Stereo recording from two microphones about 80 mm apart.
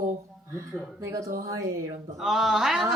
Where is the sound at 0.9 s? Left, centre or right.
Right.